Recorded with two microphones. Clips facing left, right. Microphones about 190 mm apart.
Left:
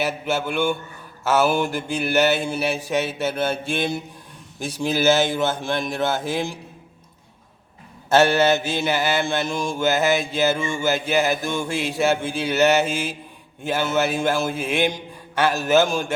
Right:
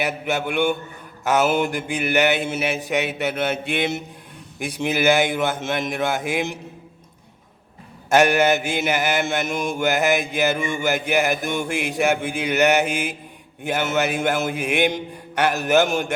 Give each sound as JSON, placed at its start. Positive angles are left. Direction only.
{"t": 0.0, "sound": "mantra", "side_deg": -15}
{"t": 5.1, "sound": "mantra", "side_deg": -15}
{"t": 8.1, "sound": "mantra", "side_deg": -15}